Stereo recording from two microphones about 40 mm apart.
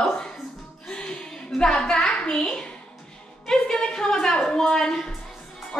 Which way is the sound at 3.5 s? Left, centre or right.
Centre.